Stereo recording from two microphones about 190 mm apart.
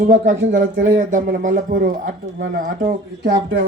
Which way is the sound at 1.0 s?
45° right (ahead or behind).